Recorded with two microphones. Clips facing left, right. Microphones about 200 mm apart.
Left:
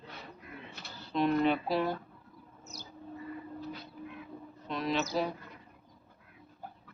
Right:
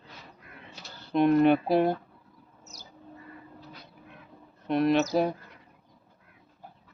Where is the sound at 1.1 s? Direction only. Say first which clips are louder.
Right 7 dB; 60° right (ahead or behind).